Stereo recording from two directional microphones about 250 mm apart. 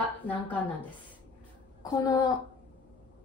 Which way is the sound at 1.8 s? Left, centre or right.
Centre.